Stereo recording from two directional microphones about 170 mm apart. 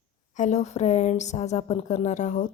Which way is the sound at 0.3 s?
45° left (ahead or behind).